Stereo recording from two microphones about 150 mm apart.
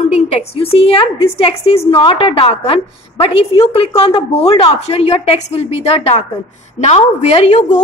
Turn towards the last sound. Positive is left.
turn(degrees=50)  # may be behind; listen again after turning